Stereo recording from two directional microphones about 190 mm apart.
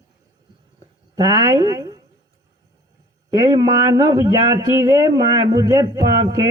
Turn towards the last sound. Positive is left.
turn(degrees=-20)  # may be behind; listen again after turning